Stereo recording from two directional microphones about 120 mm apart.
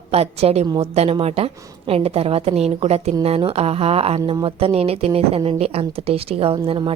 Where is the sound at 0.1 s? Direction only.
60° right (ahead or behind).